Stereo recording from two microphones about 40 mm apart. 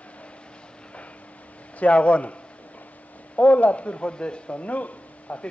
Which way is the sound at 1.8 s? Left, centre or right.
Left.